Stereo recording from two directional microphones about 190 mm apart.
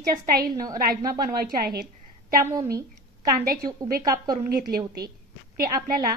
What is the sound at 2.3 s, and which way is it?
Speech, 15° right (ahead or behind).